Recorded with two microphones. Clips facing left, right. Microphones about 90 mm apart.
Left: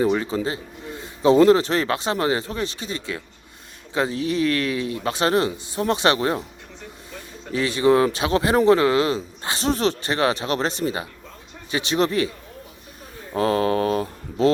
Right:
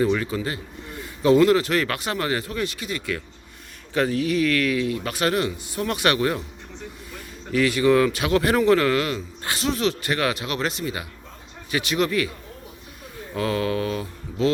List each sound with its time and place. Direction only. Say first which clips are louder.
0.0 s a man's voice: left 1 dB; 25° left (ahead or behind)
7.5 s a man's voice: even; 25° left (ahead or behind)
9.6 s a man's voice: left 2 dB; 35° left (ahead or behind)
13.3 s mantra: left 4 dB; 35° left (ahead or behind)